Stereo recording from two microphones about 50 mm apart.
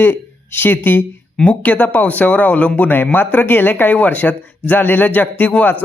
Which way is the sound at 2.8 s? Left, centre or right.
Left.